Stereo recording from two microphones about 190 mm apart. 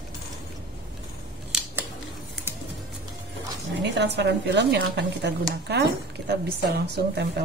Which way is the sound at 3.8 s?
65° right (ahead or behind).